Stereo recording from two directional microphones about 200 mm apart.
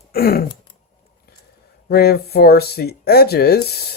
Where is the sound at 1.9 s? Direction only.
50° left (ahead or behind).